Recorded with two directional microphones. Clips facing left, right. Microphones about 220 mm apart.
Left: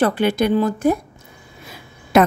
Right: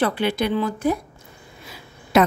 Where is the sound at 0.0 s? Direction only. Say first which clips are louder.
Left 4 dB; 45° left (ahead or behind).